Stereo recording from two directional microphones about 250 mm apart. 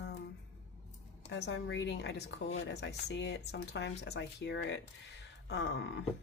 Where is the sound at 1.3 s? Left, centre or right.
Left.